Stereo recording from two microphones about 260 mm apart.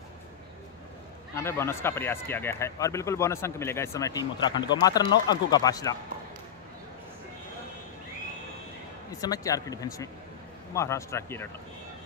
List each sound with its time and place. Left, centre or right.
1.3 s speech: centre
9.2 s speech: centre